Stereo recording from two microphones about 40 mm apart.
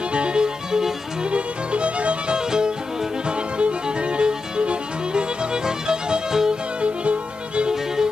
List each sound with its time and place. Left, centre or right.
0.1 s music: right
1.2 s music: right
2.3 s music: centre
6.8 s music: right
7.7 s music: centre